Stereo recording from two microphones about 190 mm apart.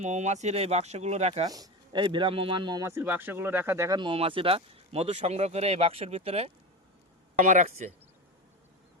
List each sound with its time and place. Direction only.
0.0 s speech: 40° right (ahead or behind)
1.5 s speech: 20° right (ahead or behind)
7.3 s speech: 45° right (ahead or behind)